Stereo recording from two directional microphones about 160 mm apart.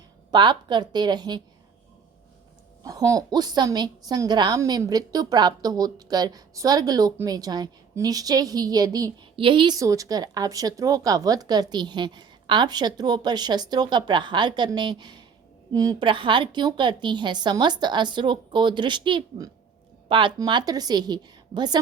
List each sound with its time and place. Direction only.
0.3 s a woman's voice: 30° right (ahead or behind)
2.8 s a woman's voice: 20° right (ahead or behind)